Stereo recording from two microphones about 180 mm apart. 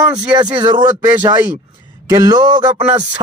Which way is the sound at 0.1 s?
20° right (ahead or behind).